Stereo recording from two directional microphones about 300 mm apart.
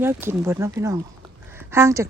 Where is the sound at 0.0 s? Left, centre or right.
Centre.